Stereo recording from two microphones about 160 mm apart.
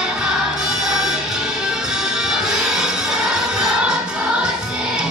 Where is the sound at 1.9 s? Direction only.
5° right (ahead or behind).